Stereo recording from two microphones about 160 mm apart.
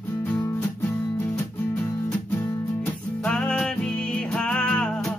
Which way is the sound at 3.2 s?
5° left (ahead or behind).